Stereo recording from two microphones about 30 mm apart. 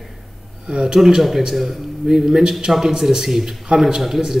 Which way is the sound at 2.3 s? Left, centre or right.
Right.